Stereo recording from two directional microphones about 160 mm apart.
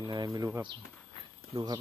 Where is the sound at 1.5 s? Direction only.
25° right (ahead or behind).